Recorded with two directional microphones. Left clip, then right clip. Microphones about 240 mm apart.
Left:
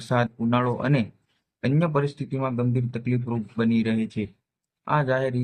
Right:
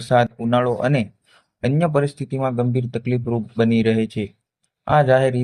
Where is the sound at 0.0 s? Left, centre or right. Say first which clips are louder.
Right 7 dB; centre.